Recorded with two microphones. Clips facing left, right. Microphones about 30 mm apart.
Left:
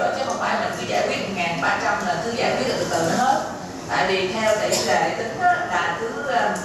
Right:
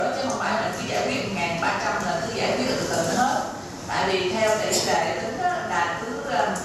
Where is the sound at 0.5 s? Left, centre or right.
Centre.